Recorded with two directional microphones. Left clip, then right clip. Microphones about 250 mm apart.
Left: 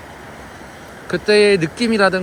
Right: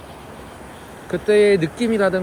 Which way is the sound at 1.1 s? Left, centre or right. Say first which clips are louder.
Left 2 dB; centre.